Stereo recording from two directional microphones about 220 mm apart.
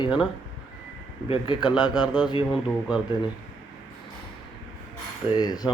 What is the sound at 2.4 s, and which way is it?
Speech, 5° right (ahead or behind).